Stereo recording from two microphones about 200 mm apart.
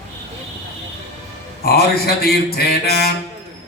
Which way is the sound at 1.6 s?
50° left (ahead or behind).